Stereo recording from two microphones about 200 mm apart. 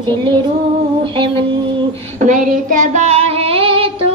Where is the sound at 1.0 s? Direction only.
25° right (ahead or behind).